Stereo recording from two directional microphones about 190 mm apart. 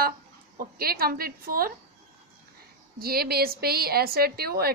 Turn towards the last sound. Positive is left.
turn(degrees=-55)  # may be behind; listen again after turning